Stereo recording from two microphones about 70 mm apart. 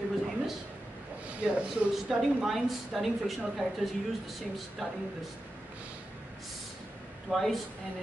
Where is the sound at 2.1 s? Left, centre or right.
Centre.